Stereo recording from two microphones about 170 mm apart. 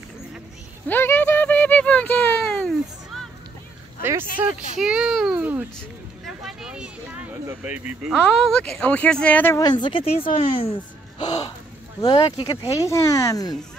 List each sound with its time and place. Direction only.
0.8 s a sound: 10° left (ahead or behind)
4.0 s speech: 15° right (ahead or behind)
6.2 s a sound: centre (ahead or behind)
7.4 s speech: 10° right (ahead or behind)
8.1 s speech: 5° left (ahead or behind)
9.6 s speech: 25° left (ahead or behind)
11.1 s speech: 25° left (ahead or behind)
12.4 s speech: 35° left (ahead or behind)
12.7 s speech: 20° left (ahead or behind)